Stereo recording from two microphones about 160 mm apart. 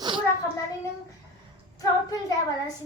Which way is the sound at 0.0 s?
30° right (ahead or behind).